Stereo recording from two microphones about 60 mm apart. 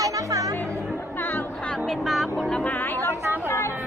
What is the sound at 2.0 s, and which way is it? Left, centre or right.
Speech, centre.